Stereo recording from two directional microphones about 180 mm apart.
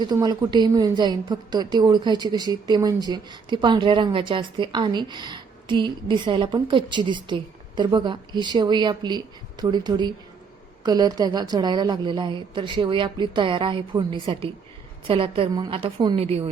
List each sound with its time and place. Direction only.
0.0 s a woman's voice: 25° right (ahead or behind)